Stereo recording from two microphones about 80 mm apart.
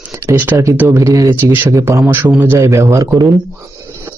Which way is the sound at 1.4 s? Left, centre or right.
Right.